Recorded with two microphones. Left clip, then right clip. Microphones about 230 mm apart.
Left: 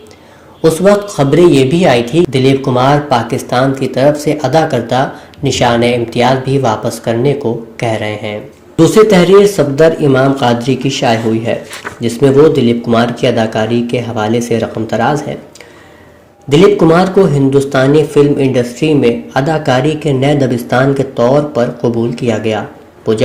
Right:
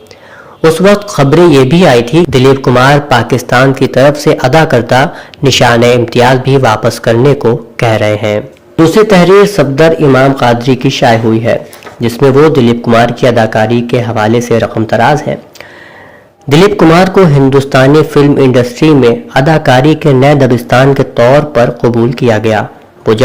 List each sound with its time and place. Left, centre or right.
0.6 s speech: right
16.5 s speech: right